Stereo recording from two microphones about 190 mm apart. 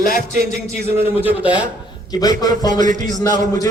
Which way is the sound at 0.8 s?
10° right (ahead or behind).